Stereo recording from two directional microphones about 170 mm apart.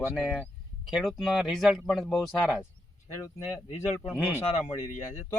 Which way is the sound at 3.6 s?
40° left (ahead or behind).